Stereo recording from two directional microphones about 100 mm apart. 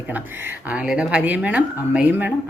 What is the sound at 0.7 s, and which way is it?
A woman's voice, 10° right (ahead or behind).